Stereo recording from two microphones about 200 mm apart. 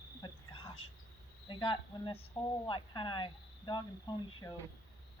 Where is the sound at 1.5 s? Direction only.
25° left (ahead or behind).